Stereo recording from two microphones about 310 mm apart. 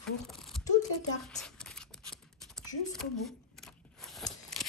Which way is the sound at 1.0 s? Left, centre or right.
Centre.